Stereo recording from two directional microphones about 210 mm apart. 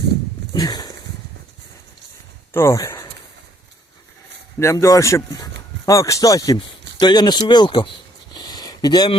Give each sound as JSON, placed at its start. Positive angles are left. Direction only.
{"t": 0.5, "sound": "speech", "side_deg": 20}
{"t": 2.5, "sound": "speech", "side_deg": 10}
{"t": 4.6, "sound": "speech", "side_deg": 15}
{"t": 8.4, "sound": "a sound", "side_deg": 20}